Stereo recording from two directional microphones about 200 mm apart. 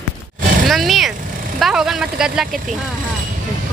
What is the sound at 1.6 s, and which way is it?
Speech, centre (ahead or behind).